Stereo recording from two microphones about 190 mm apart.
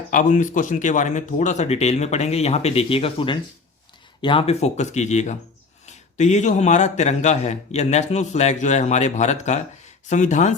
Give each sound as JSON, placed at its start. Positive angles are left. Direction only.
{"t": 0.1, "sound": "a man's voice", "side_deg": 40}